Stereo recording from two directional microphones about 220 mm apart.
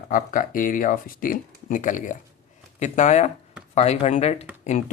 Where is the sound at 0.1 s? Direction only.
40° left (ahead or behind).